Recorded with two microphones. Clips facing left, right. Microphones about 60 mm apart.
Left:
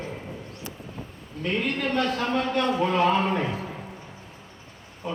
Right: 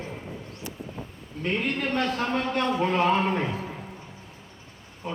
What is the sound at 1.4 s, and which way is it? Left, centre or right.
A man's voice, right.